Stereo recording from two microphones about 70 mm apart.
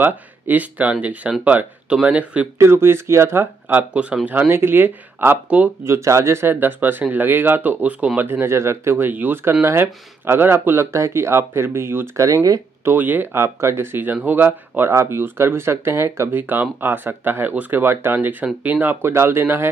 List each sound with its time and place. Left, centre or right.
0.0 s speech: right
2.6 s speech: right
5.9 s speech: right; by 8.3 s centre
8.3 s speech: right
16.3 s speech: right